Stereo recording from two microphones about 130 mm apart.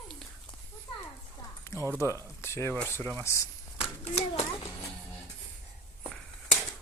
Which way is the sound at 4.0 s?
55° left (ahead or behind).